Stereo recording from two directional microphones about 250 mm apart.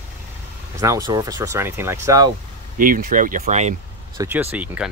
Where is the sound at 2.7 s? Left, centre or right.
Right.